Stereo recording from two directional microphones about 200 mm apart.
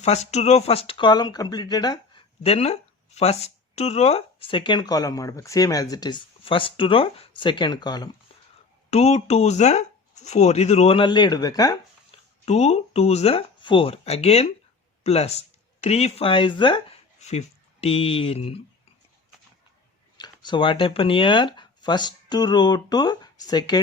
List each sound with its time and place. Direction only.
0.0 s speech: 35° left (ahead or behind)
8.9 s speech: 35° left (ahead or behind)
12.1 s a sound: 30° left (ahead or behind)
12.5 s speech: 30° left (ahead or behind)
20.1 s speech: 20° left (ahead or behind)